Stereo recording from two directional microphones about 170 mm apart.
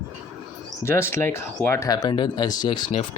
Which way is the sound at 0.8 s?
15° left (ahead or behind).